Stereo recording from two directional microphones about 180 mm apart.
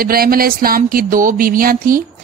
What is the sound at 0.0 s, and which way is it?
Speech, 55° right (ahead or behind).